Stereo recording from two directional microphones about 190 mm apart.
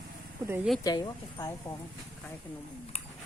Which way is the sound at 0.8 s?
20° left (ahead or behind).